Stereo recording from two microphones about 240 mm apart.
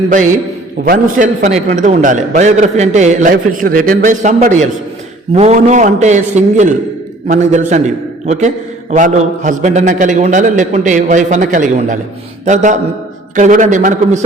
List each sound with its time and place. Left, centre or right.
0.1 s a man's voice: right